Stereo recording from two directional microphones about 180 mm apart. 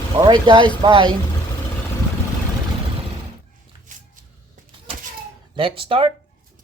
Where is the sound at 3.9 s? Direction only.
45° right (ahead or behind).